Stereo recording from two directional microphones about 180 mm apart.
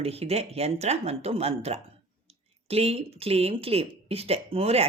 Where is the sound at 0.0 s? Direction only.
35° right (ahead or behind).